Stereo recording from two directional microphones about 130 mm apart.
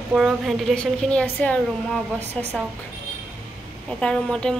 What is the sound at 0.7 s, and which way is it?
A woman's voice, 10° left (ahead or behind).